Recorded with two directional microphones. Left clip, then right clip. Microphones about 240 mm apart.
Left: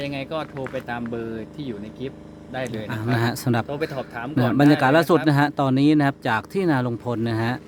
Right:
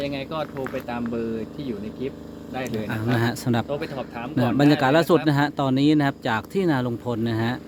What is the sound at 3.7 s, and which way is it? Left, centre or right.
Speech, left.